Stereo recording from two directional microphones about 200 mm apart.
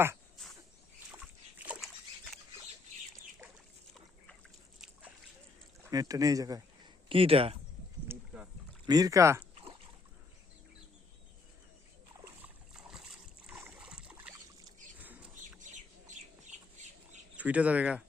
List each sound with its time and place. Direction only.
1.1 s dog: 5° right (ahead or behind)
5.8 s speech: 20° right (ahead or behind)
7.1 s speech: 25° right (ahead or behind)
8.0 s rowboat: 10° right (ahead or behind)
8.9 s speech: 20° right (ahead or behind)
12.2 s boat: 5° right (ahead or behind)
14.9 s rodents: 10° right (ahead or behind)
17.3 s speech: 5° right (ahead or behind)